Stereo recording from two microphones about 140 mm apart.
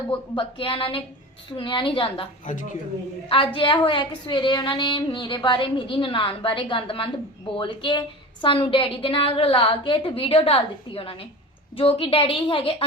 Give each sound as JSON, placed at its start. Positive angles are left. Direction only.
{"t": 0.1, "sound": "a woman's voice", "side_deg": 40}
{"t": 2.4, "sound": "speech", "side_deg": 65}
{"t": 3.2, "sound": "a woman's voice", "side_deg": 40}